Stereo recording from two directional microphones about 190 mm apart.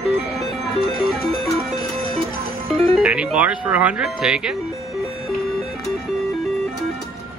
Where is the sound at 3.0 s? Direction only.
5° right (ahead or behind).